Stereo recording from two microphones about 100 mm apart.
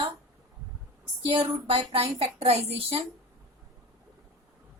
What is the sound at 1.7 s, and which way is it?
A woman's voice, 70° right (ahead or behind).